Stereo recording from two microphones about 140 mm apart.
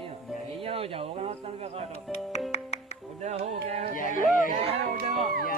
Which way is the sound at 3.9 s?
70° left (ahead or behind).